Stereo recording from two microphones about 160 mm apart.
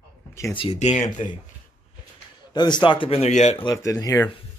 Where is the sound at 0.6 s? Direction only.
40° left (ahead or behind).